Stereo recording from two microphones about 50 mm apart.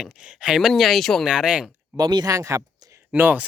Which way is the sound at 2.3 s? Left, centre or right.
Right.